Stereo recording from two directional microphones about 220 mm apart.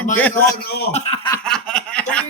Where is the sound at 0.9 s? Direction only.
30° left (ahead or behind).